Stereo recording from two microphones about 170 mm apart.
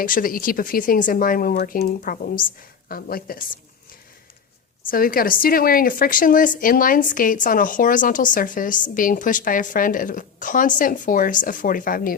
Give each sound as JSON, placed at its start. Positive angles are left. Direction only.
{"t": 0.0, "sound": "speech", "side_deg": 55}
{"t": 4.9, "sound": "speech", "side_deg": 60}